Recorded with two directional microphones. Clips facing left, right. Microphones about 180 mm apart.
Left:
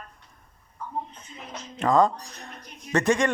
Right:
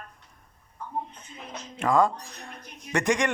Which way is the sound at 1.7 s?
10° right (ahead or behind).